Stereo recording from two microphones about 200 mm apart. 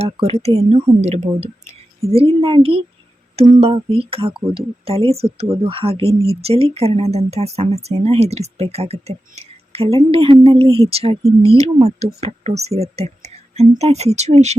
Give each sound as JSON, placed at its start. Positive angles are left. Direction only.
{"t": 0.0, "sound": "speech", "side_deg": -30}